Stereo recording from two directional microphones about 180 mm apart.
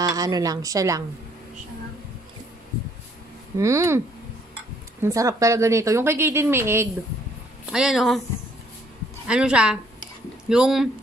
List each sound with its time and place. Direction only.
0.0 s a woman's voice: 20° right (ahead or behind)
3.5 s speech: 15° right (ahead or behind)
5.0 s speech: 20° right (ahead or behind)
7.7 s speech: 5° right (ahead or behind)
9.3 s speech: 5° right (ahead or behind)